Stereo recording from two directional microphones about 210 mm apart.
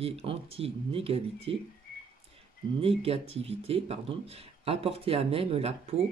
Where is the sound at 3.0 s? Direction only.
30° right (ahead or behind).